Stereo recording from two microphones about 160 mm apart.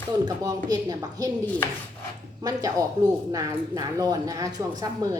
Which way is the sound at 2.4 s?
20° right (ahead or behind).